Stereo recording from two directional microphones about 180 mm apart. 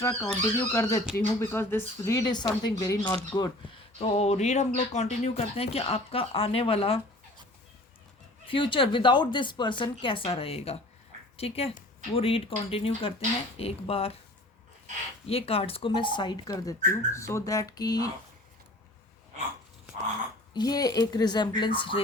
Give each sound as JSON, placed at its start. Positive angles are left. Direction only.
{"t": 0.0, "sound": "speech", "side_deg": 15}
{"t": 4.0, "sound": "speech", "side_deg": 35}
{"t": 8.4, "sound": "speech", "side_deg": 30}
{"t": 15.3, "sound": "speech", "side_deg": 30}
{"t": 20.5, "sound": "speech", "side_deg": 20}